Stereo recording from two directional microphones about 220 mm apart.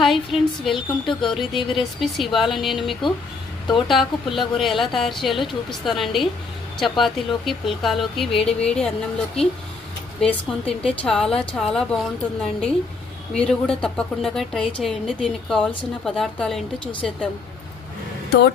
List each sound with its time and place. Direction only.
0.0 s a woman's voice: centre (ahead or behind)
18.3 s speech: 50° left (ahead or behind)